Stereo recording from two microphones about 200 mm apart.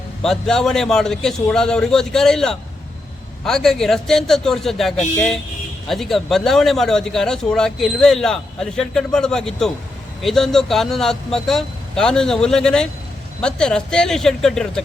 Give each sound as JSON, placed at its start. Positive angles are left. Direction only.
{"t": 0.2, "sound": "speech", "side_deg": 0}